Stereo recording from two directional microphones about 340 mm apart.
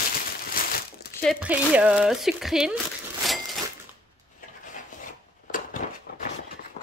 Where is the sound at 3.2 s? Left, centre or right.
Centre.